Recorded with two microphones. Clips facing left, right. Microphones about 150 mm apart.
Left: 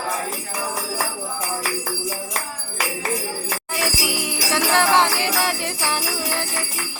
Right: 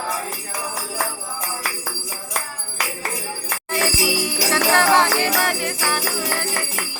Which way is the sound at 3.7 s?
15° left (ahead or behind).